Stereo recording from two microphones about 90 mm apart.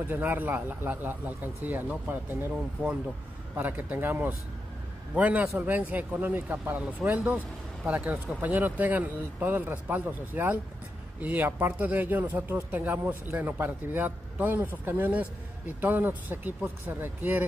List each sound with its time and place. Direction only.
0.1 s a man's voice: 20° right (ahead or behind)